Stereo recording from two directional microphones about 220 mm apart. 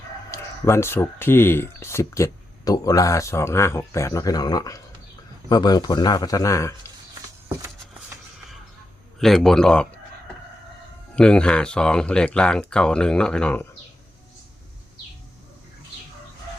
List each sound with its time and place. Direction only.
0.3 s speech: 10° left (ahead or behind)
9.1 s speech: centre (ahead or behind)
11.1 s speech: 5° left (ahead or behind)